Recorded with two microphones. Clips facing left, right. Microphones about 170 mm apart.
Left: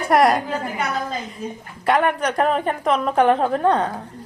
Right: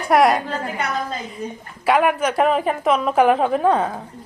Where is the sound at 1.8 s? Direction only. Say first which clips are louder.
Right 2 dB; 5° right (ahead or behind).